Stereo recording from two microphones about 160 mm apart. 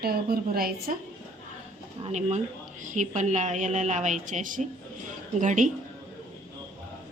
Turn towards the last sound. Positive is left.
turn(degrees=-50)  # may be behind; listen again after turning